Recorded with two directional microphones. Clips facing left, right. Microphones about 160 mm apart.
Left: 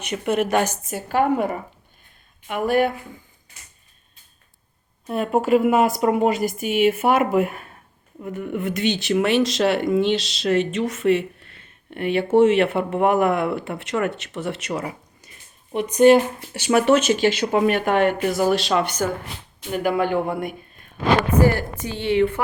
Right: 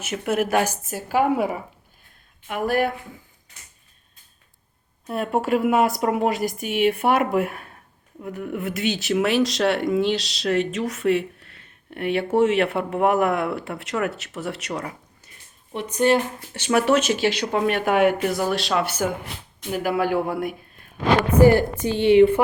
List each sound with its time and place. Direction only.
0.0 s speech: 5° right (ahead or behind)
5.0 s speech: centre (ahead or behind)
21.8 s speech: 20° right (ahead or behind)